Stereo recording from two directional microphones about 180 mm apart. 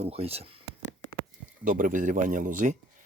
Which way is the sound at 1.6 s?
50° right (ahead or behind).